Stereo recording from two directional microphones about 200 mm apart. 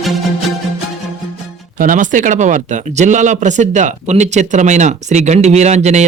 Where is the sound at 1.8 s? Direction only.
40° right (ahead or behind).